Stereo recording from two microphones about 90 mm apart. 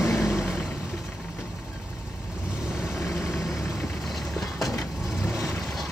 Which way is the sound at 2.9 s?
5° right (ahead or behind).